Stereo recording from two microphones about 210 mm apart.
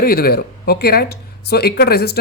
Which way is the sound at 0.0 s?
45° left (ahead or behind).